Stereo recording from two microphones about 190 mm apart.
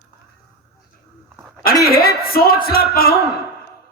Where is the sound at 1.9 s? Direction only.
55° left (ahead or behind).